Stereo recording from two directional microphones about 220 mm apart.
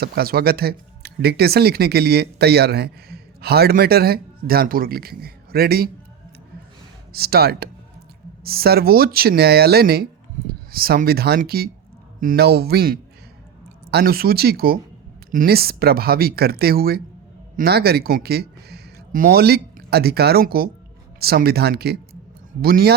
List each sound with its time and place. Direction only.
0.0 s speech: 45° right (ahead or behind)
7.1 s speech: 45° right (ahead or behind)